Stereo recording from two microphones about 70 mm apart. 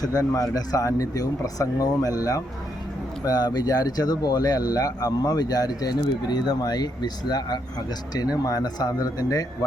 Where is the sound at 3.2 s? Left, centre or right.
Left.